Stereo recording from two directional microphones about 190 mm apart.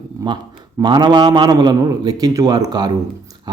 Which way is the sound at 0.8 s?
25° right (ahead or behind).